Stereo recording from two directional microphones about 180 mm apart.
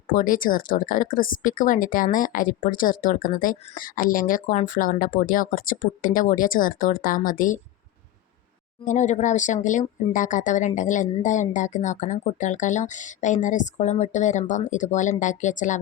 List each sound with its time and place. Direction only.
0.1 s speech: 50° left (ahead or behind)
8.8 s speech: 40° left (ahead or behind)